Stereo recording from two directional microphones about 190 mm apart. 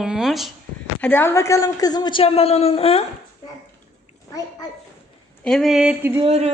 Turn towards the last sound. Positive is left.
turn(degrees=-30)  # may be behind; listen again after turning